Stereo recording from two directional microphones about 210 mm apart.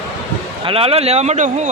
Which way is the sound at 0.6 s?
25° right (ahead or behind).